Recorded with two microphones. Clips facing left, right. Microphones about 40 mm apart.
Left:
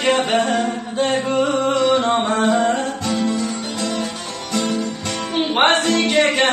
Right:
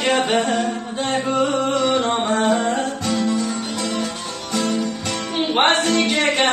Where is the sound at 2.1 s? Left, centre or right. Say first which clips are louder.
Left 1 dB; centre.